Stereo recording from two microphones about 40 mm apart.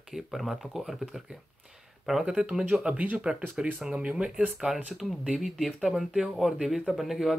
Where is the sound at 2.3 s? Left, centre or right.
Centre.